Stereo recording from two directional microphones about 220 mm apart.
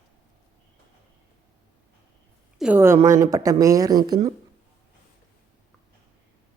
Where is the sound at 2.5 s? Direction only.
5° right (ahead or behind).